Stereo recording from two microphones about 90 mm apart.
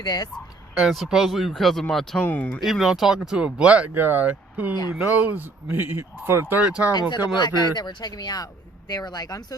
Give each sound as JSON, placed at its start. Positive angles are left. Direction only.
{"t": 0.0, "sound": "speech", "side_deg": 45}
{"t": 0.8, "sound": "speech", "side_deg": -5}
{"t": 2.2, "sound": "speech", "side_deg": 20}
{"t": 2.6, "sound": "speech", "side_deg": -5}
{"t": 6.6, "sound": "speech", "side_deg": -15}
{"t": 7.3, "sound": "speech", "side_deg": 50}